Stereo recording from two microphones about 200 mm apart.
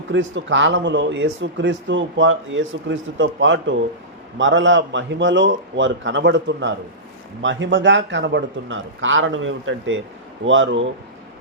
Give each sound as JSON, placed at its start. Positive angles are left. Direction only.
{"t": 0.1, "sound": "a man's voice", "side_deg": -65}